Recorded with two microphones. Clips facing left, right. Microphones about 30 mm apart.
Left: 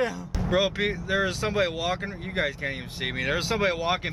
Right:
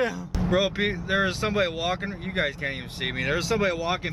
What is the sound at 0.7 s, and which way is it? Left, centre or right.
Speech, centre.